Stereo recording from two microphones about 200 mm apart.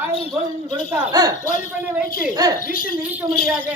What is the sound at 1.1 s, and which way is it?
A man's voice, 20° right (ahead or behind).